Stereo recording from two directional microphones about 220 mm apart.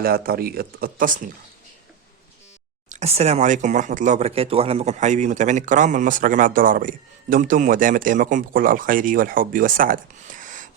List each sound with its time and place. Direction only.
0.0 s speech: 45° right (ahead or behind)
2.9 s speech: 30° right (ahead or behind)